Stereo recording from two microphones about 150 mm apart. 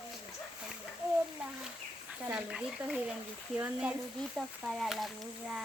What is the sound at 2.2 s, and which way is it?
Speech, 5° right (ahead or behind).